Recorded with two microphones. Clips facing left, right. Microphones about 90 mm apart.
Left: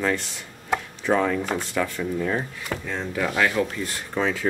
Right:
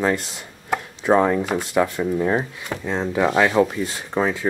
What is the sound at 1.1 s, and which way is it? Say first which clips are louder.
Speech: right 5 dB; 25° right (ahead or behind).